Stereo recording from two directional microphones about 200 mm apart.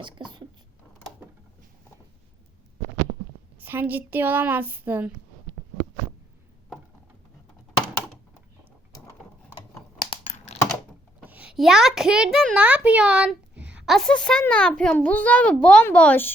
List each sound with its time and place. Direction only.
0.0 s speech: 25° right (ahead or behind)
3.6 s speech: 10° right (ahead or behind)
10.2 s computer keyboard: 35° left (ahead or behind)
11.3 s a child's voice: 5° right (ahead or behind)